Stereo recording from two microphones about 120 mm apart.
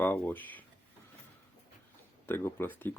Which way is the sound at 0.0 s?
15° left (ahead or behind).